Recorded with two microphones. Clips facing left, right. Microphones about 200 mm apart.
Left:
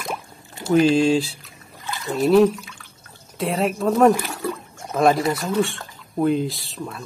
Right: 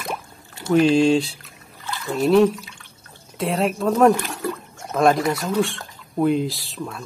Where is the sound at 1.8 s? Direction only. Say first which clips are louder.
Even; 15° left (ahead or behind).